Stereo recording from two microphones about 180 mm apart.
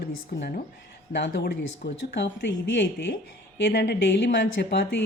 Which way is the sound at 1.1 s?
80° left.